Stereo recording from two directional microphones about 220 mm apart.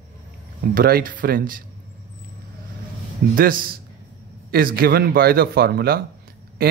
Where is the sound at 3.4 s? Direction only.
40° right (ahead or behind).